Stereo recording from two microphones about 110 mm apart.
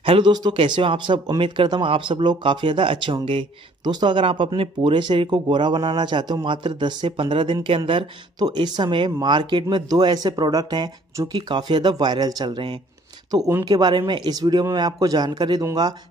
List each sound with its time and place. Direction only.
0.0 s speech: 55° right (ahead or behind)
0.3 s speech: 40° right (ahead or behind)
0.6 s speech: 50° right (ahead or behind)
8.4 s speech: 40° right (ahead or behind)